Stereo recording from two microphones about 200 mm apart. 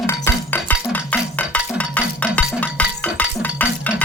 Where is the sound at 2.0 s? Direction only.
5° left (ahead or behind).